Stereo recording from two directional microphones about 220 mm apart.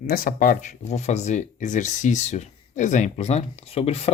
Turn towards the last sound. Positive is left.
turn(degrees=30)  # may be behind; listen again after turning